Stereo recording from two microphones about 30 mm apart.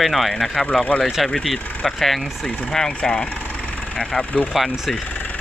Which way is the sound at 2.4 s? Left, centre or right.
Centre.